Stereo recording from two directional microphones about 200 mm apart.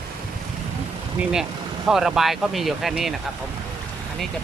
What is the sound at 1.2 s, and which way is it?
Speech, 5° right (ahead or behind).